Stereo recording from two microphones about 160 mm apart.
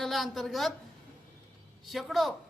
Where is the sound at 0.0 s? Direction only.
Centre (ahead or behind).